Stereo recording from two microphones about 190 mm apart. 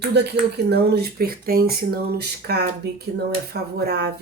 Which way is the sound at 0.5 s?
55° right (ahead or behind).